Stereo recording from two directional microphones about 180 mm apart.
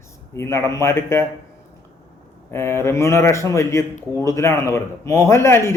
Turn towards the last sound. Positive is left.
turn(degrees=15)  # may be behind; listen again after turning